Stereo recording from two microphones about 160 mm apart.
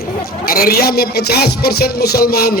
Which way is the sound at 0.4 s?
65° left (ahead or behind).